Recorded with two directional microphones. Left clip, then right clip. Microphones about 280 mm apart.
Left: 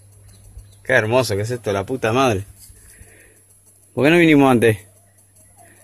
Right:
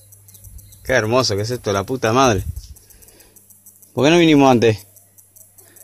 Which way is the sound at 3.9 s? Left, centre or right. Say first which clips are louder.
Even; centre.